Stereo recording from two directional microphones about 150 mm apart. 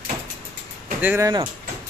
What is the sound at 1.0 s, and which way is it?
Speech, 15° right (ahead or behind).